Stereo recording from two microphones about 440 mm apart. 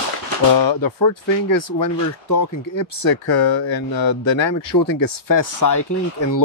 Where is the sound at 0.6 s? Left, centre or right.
Left.